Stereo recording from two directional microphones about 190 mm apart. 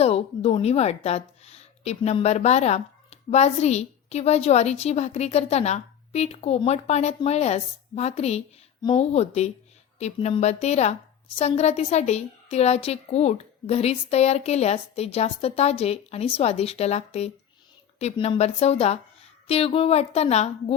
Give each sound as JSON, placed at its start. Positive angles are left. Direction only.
{"t": 0.0, "sound": "a woman's voice", "side_deg": 35}